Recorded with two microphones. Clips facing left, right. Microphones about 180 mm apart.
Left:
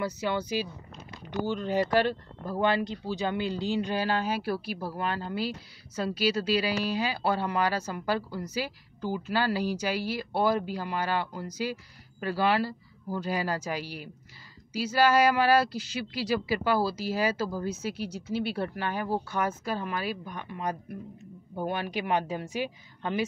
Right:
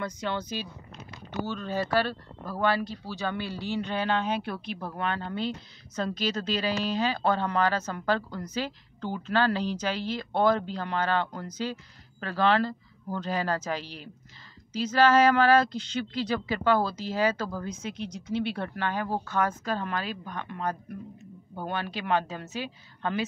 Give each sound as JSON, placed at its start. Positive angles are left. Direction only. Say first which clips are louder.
{"t": 0.0, "sound": "a woman's voice", "louder": "left 2 dB", "side_deg": 5}